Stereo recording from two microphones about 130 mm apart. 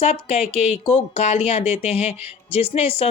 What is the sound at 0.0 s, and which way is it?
Speech, 50° left (ahead or behind).